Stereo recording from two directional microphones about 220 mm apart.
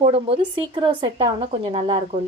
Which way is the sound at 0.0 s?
25° right (ahead or behind).